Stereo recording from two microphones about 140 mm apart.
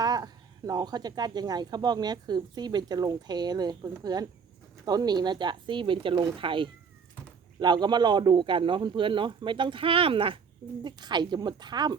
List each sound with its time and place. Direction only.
0.0 s a man's voice: 25° right (ahead or behind)